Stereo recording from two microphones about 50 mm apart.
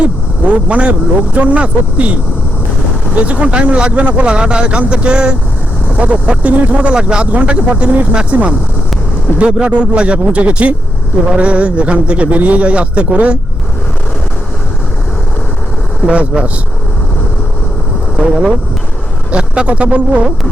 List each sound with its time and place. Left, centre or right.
0.0 s speech: right
3.2 s speech: right
7.3 s speech: right
16.0 s speech: right
19.3 s speech: right